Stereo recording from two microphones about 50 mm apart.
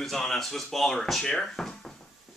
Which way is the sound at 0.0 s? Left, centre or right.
Centre.